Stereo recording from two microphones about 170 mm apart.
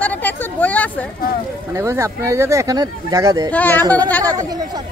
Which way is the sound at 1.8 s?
15° right (ahead or behind).